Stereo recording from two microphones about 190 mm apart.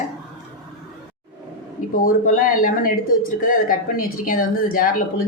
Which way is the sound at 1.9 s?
45° left (ahead or behind).